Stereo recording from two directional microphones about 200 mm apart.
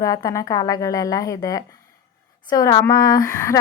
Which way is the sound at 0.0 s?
15° left (ahead or behind).